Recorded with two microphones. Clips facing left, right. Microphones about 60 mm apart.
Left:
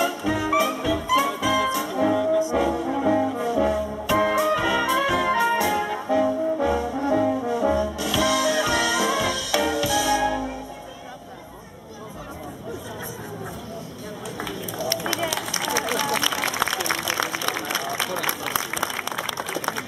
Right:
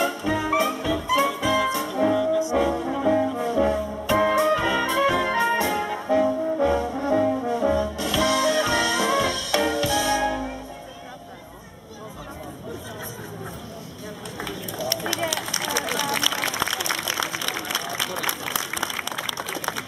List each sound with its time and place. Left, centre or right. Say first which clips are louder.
0.0 s music: even; centre
2.5 s brass instrument: even; centre
4.4 s music: even; centre
5.9 s brass instrument: even; centre
6.6 s brass instrument: right 1 dB; centre
16.0 s a sound: left 1 dB; centre
17.1 s a sound: left 2 dB; left